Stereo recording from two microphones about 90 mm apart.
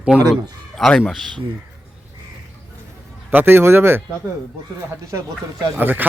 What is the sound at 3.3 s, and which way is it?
Speech, 20° right (ahead or behind).